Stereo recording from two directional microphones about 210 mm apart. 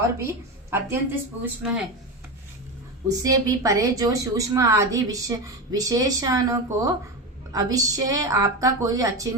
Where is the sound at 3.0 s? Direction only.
15° right (ahead or behind).